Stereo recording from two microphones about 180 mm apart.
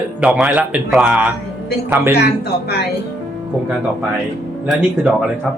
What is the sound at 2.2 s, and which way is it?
Speech, 65° left (ahead or behind).